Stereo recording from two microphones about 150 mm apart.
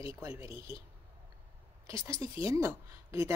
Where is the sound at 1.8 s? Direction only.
20° right (ahead or behind).